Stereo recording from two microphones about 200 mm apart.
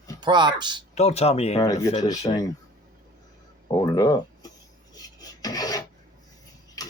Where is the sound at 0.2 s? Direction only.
25° right (ahead or behind).